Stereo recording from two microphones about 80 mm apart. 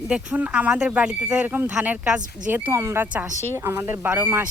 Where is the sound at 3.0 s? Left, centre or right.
Centre.